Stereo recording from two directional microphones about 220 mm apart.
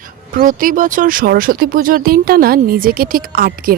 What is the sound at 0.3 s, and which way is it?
Speech, 40° right (ahead or behind).